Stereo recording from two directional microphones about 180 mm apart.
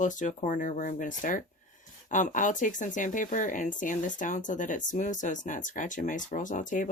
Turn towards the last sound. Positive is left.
turn(degrees=45)  # may be behind; listen again after turning